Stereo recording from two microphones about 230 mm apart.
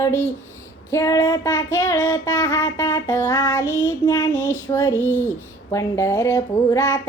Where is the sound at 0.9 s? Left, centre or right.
Centre.